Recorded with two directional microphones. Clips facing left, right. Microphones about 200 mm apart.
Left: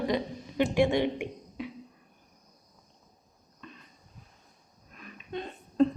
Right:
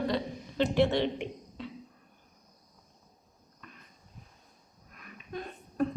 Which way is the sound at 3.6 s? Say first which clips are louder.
Left 5 dB; 25° left (ahead or behind).